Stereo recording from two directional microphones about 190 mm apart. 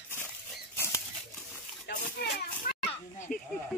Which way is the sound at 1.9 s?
60° left (ahead or behind).